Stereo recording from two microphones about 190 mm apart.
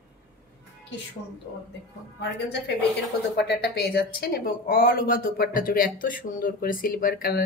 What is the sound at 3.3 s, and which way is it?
Speech, 65° left (ahead or behind).